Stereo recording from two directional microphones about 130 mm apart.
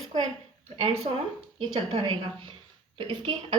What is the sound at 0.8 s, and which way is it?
Speech, 50° right (ahead or behind).